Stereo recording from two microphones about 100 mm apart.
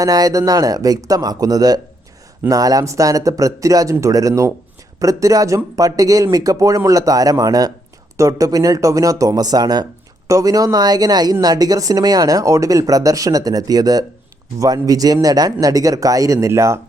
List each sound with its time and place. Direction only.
0.0 s speech: 40° right (ahead or behind)